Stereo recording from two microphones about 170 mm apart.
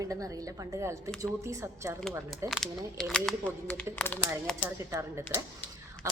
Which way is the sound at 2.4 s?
Centre (ahead or behind).